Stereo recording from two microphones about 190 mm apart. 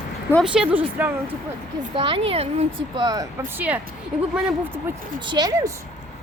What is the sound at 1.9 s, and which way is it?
Speech, 25° right (ahead or behind).